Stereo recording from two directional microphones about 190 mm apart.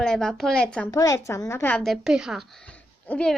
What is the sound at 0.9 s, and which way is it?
A woman's voice, 15° left (ahead or behind).